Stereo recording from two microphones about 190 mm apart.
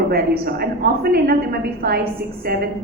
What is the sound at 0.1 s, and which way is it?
A woman's voice, 55° right (ahead or behind).